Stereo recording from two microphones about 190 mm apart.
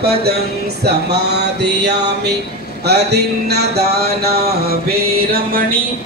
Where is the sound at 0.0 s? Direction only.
55° right (ahead or behind).